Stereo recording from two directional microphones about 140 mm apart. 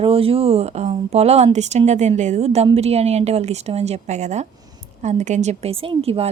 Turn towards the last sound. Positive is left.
turn(degrees=-45)  # may be behind; listen again after turning